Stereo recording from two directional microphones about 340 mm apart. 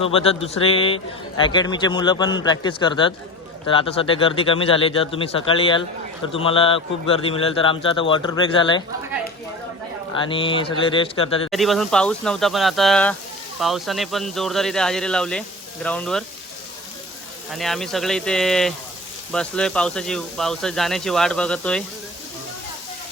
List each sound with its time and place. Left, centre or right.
0.0 s a man's voice: centre
10.2 s a man's voice: centre
11.5 s speech: centre
17.5 s speech: centre